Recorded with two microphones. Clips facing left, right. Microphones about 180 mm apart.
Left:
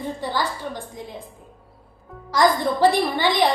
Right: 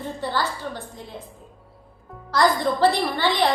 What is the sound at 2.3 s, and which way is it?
A woman's voice, 10° left (ahead or behind).